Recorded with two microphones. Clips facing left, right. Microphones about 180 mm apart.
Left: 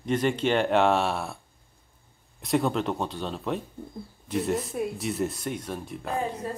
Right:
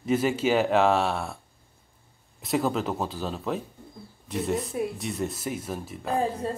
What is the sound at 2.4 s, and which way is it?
Speech, centre (ahead or behind).